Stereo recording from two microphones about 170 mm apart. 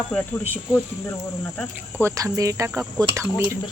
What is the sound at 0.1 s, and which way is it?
Speech, 10° left (ahead or behind).